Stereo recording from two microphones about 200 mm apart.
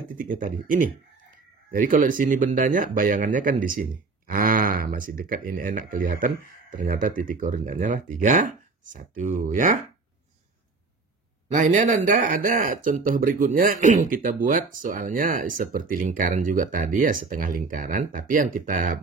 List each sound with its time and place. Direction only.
0.2 s speech: 40° right (ahead or behind)
11.5 s speech: 40° right (ahead or behind)